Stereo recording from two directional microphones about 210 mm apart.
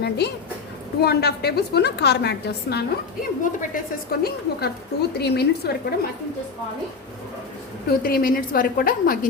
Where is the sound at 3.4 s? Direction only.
40° left (ahead or behind).